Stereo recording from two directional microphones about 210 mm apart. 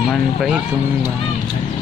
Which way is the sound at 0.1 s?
Centre (ahead or behind).